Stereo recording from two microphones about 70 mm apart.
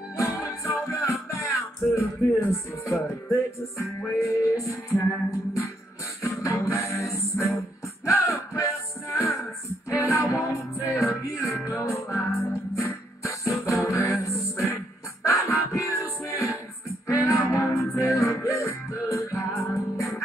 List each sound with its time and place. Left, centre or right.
0.2 s music: left
6.2 s music: left